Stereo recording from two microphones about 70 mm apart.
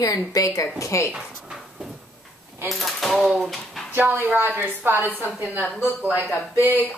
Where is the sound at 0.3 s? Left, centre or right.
Left.